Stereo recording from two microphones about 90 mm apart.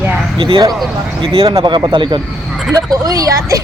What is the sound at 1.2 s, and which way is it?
Speech, 90° right.